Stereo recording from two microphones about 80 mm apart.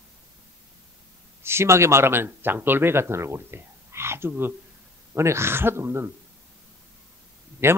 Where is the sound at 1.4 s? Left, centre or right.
Right.